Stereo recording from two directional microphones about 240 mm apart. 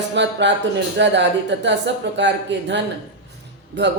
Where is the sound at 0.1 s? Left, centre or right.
Right.